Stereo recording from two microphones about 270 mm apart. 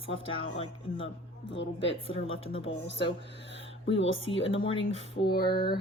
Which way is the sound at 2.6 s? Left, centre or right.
Left.